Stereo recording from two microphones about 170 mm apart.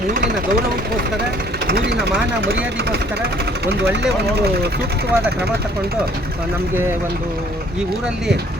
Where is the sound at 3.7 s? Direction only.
80° right.